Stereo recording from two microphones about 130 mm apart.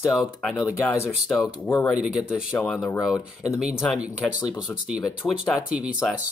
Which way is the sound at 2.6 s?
5° left (ahead or behind).